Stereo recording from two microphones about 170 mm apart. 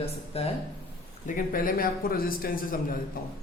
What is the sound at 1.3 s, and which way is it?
A man's voice, 55° left (ahead or behind).